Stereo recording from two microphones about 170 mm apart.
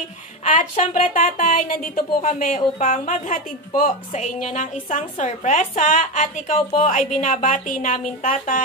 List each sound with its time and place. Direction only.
0.5 s speech: 50° left (ahead or behind)